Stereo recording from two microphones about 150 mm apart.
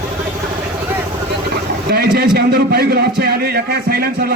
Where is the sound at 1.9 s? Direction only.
90° right.